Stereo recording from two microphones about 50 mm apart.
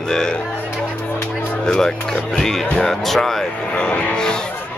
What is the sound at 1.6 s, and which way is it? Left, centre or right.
Speech, centre.